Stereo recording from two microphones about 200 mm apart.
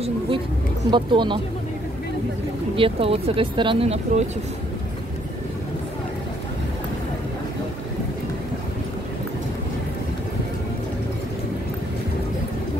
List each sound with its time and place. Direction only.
0.8 s speech: 25° right (ahead or behind)
2.7 s speech: 25° right (ahead or behind)